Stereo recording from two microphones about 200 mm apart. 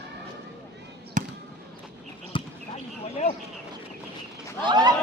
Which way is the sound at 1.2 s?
40° right (ahead or behind).